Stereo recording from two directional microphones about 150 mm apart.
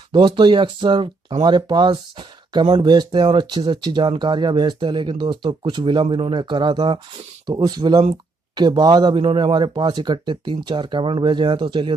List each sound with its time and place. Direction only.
0.1 s speech: 30° right (ahead or behind)